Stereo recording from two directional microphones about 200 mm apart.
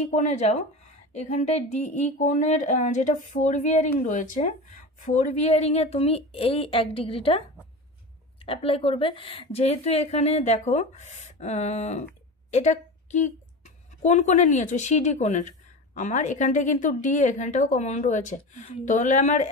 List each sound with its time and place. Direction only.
0.0 s a woman's voice: 35° left (ahead or behind)